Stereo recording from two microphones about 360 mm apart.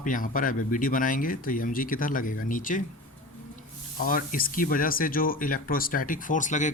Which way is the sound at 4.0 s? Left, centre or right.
Left.